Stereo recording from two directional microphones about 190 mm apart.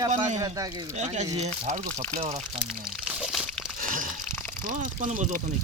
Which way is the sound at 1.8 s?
5° left (ahead or behind).